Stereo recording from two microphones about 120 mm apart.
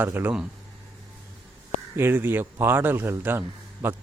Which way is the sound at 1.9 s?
20° right (ahead or behind).